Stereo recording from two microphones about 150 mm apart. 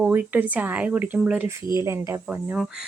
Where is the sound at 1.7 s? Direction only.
20° right (ahead or behind).